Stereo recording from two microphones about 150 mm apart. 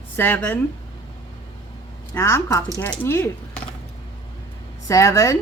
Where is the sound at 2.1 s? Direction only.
20° left (ahead or behind).